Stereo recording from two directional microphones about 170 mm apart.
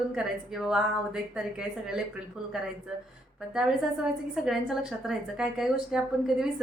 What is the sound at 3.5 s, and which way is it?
A woman's voice, 5° right (ahead or behind).